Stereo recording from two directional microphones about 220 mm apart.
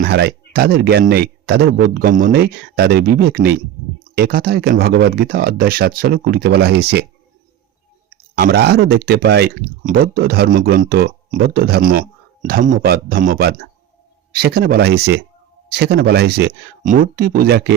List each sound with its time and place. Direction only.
0.0 s speech: 50° right (ahead or behind)
8.4 s speech: 45° right (ahead or behind)